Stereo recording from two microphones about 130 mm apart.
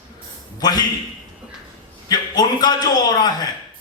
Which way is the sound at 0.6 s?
30° left (ahead or behind).